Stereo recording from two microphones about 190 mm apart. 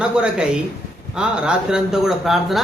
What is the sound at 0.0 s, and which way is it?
A man's voice, 5° right (ahead or behind).